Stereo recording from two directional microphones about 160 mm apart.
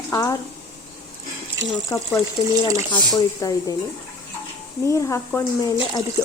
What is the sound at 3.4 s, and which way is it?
Speech, 20° left (ahead or behind).